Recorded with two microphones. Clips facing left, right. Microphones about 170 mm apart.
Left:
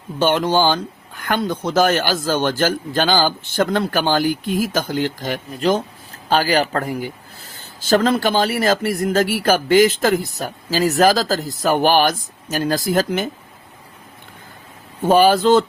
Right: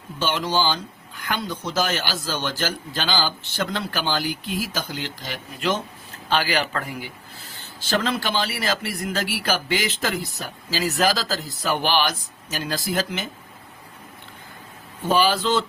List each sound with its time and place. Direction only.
0.2 s speech: 50° left (ahead or behind)
15.0 s speech: 50° left (ahead or behind)